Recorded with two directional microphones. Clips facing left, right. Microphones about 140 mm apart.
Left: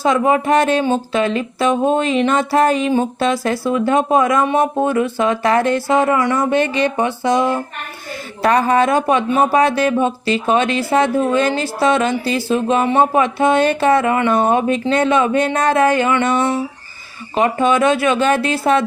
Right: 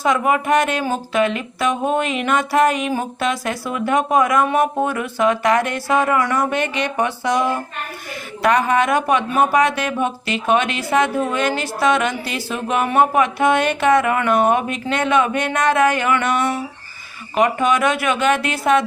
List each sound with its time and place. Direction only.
0.0 s speech: 30° left (ahead or behind)